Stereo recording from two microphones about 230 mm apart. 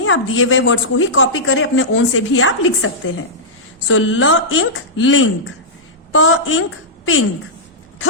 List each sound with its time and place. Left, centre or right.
0.0 s speech: left